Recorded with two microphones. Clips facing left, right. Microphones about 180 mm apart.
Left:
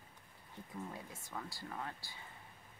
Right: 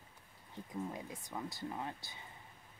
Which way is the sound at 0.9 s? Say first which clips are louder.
Right 3 dB; 15° right (ahead or behind).